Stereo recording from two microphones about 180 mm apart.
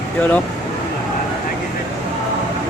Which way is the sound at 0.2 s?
10° left (ahead or behind).